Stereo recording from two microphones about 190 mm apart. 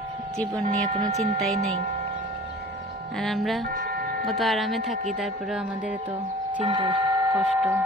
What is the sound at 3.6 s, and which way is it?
Music, 50° right (ahead or behind).